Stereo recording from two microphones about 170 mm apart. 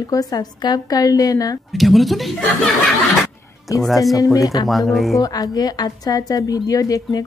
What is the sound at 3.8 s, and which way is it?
Speech, centre (ahead or behind).